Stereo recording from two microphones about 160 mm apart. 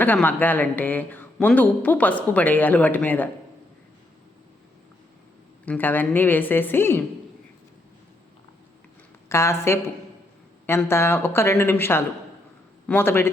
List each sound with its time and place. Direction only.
0.0 s speech: 10° left (ahead or behind)
5.6 s speech: 10° left (ahead or behind)
9.3 s speech: 15° left (ahead or behind)